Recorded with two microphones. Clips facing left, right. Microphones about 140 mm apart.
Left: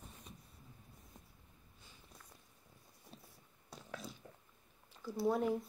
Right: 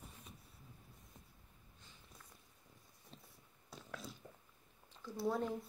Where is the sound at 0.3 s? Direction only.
5° right (ahead or behind).